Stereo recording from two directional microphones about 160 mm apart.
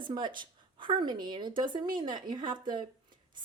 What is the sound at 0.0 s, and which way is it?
A woman's voice, 30° right (ahead or behind).